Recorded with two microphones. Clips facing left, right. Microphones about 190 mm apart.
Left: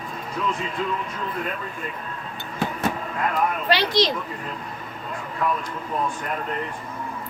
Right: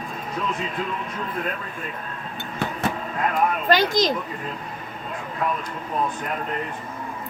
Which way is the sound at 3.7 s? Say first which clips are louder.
Right 1 dB; 45° right (ahead or behind).